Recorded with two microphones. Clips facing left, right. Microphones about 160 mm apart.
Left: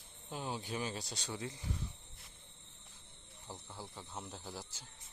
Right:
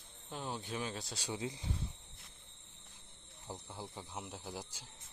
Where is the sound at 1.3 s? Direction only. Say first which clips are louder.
Right 3 dB; 20° right (ahead or behind).